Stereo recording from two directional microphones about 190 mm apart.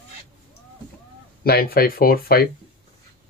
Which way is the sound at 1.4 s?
55° left (ahead or behind).